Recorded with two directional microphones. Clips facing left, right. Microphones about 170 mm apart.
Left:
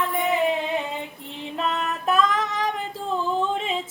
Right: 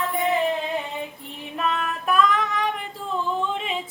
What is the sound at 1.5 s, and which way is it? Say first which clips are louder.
Female singing: even; 25° left (ahead or behind).